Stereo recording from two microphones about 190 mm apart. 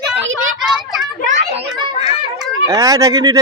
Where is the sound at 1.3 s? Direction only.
40° right (ahead or behind).